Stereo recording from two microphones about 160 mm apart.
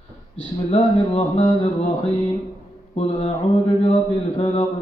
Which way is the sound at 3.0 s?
40° left (ahead or behind).